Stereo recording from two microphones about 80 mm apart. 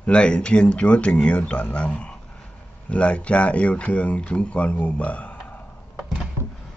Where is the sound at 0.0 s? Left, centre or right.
Centre.